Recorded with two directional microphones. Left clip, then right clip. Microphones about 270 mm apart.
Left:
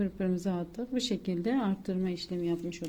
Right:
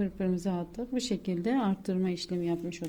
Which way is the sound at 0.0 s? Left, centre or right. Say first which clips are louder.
Even; centre.